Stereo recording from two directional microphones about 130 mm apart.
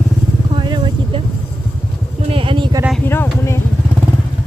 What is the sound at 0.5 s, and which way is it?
Vehicle, 40° right (ahead or behind).